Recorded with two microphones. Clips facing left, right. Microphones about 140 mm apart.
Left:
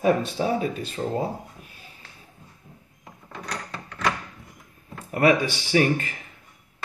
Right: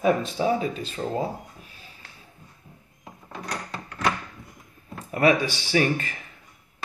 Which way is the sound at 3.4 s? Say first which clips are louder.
Right 1 dB; 10° right (ahead or behind).